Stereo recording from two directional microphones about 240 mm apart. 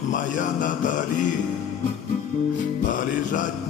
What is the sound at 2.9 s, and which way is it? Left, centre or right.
Music, left.